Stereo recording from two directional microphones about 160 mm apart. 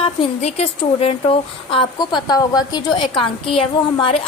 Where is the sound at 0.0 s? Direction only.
35° left (ahead or behind).